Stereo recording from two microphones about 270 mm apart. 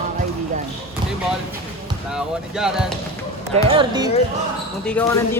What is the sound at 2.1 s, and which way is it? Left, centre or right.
Speech, centre.